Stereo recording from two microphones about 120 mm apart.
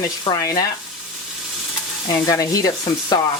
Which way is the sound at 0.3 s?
30° left (ahead or behind).